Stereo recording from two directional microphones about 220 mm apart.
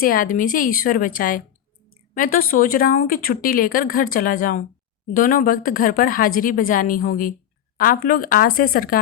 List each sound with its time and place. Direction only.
0.0 s speech: 40° left (ahead or behind)